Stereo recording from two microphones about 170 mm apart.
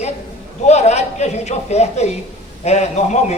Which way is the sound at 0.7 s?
40° left (ahead or behind).